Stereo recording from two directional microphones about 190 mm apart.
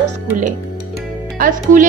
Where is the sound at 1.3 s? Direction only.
45° right (ahead or behind).